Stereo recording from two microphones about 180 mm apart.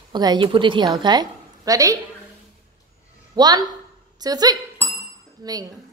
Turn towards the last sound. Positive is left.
turn(degrees=-20)  # may be behind; listen again after turning